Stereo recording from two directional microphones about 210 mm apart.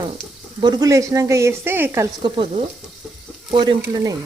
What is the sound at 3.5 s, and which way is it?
Stir, 20° right (ahead or behind).